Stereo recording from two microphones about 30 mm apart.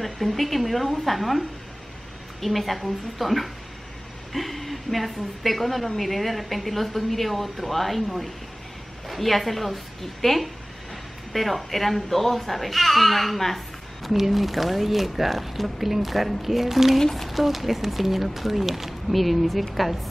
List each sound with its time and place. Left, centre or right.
0.0 s speech: centre
2.4 s a woman's voice: centre
14.1 s speech: centre